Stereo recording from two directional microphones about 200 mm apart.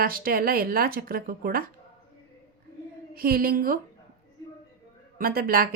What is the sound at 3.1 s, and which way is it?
Speech, 45° right (ahead or behind).